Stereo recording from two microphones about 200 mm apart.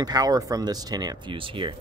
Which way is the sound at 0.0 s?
20° right (ahead or behind).